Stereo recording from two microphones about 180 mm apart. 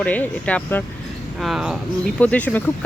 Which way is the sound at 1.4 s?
Centre (ahead or behind).